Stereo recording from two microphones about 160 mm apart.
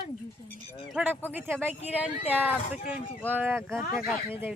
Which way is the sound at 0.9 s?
5° right (ahead or behind).